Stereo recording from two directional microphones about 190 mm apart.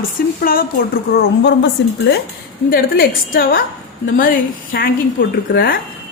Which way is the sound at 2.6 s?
50° left (ahead or behind).